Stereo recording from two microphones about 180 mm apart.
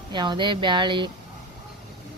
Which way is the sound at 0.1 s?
25° right (ahead or behind).